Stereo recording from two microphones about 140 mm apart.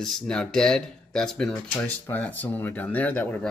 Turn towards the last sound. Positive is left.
turn(degrees=10)  # may be behind; listen again after turning